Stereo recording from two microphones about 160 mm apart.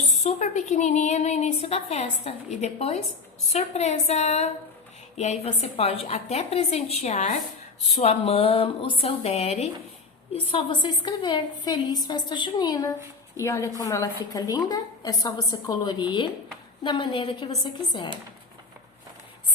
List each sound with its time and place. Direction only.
0.2 s a woman's voice: 45° left (ahead or behind); by 18.1 s 25° left (ahead or behind)